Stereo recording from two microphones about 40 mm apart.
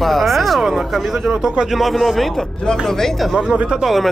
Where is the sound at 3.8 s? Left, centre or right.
Centre.